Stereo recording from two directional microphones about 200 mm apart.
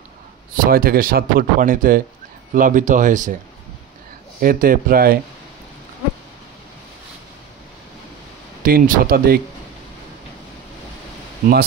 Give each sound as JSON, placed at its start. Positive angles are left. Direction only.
{"t": 0.7, "sound": "speech", "side_deg": -45}
{"t": 4.4, "sound": "speech", "side_deg": -45}
{"t": 8.6, "sound": "speech", "side_deg": -45}